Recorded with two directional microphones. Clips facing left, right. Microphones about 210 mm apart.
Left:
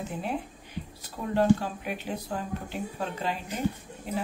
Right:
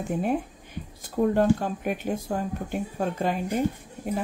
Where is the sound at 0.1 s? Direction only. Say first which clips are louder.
Right 7 dB; 50° right (ahead or behind).